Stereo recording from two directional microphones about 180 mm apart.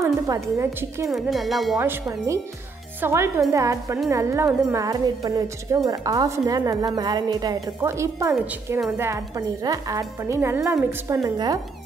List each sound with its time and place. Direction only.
0.0 s speech: 15° right (ahead or behind)
1.0 s speech: centre (ahead or behind)
1.8 s a woman's voice: 15° right (ahead or behind)